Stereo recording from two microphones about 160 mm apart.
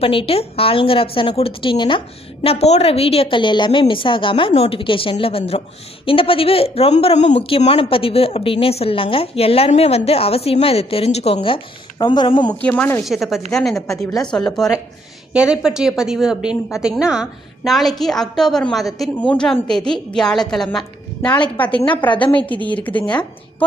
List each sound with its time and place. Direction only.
0.0 s a woman's voice: 35° left (ahead or behind)
12.5 s speech: 10° left (ahead or behind)
13.1 s a woman's voice: centre (ahead or behind)
21.2 s a woman's voice: 30° left (ahead or behind)
22.7 s speech: 10° left (ahead or behind)